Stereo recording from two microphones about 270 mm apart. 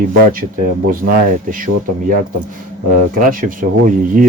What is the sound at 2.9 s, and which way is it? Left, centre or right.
Speech, right.